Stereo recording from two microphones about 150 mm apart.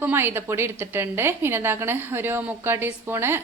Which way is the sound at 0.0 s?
15° right (ahead or behind).